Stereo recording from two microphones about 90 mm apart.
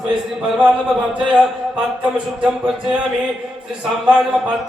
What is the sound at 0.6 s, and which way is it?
Speech, 15° right (ahead or behind).